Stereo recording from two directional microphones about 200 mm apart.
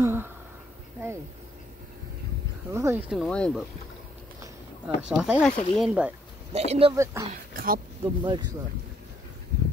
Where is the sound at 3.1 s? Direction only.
Centre (ahead or behind).